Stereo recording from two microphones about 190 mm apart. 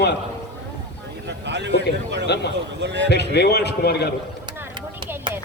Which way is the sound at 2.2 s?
60° left (ahead or behind).